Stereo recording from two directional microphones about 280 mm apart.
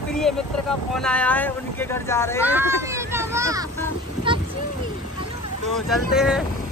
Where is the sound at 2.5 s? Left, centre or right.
Centre.